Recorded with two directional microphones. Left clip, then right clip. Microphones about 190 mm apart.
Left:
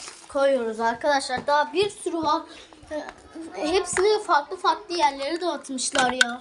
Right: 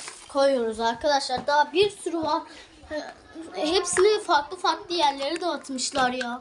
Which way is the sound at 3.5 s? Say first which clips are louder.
Even; 5° right (ahead or behind).